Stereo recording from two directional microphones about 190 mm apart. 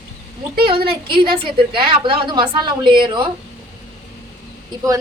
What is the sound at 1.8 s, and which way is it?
A woman's voice, 25° right (ahead or behind).